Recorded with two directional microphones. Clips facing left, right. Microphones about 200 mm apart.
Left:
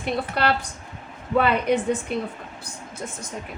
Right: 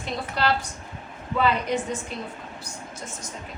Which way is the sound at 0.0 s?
60° left (ahead or behind).